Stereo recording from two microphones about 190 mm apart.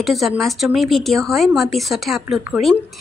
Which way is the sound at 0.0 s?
Centre (ahead or behind).